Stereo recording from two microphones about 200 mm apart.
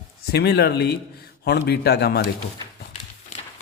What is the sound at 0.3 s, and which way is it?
Speech, 55° left (ahead or behind).